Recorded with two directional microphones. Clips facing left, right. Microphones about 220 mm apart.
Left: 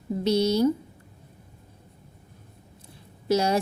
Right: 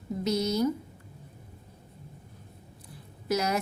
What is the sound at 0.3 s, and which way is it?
Speech, 30° left (ahead or behind).